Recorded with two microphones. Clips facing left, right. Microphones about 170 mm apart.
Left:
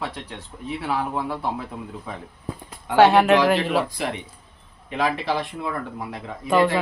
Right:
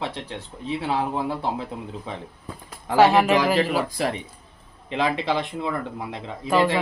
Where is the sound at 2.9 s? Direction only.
Centre (ahead or behind).